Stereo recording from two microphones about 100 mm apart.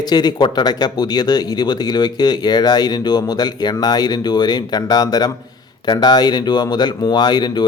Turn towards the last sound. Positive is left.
turn(degrees=45)  # may be behind; listen again after turning